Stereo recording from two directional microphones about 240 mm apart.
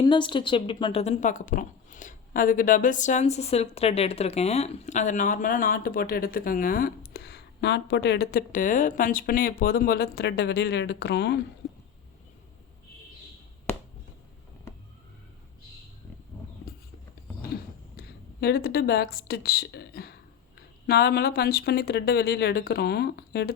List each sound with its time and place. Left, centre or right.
0.0 s a woman's voice: centre; by 11.3 s left
16.7 s a sound: left
20.8 s a woman's voice: left